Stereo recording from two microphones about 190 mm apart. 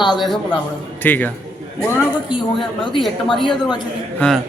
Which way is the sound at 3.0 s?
Centre (ahead or behind).